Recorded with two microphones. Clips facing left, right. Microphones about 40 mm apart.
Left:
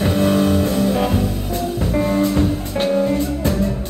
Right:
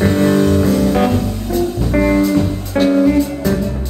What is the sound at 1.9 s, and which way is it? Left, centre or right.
Music, right.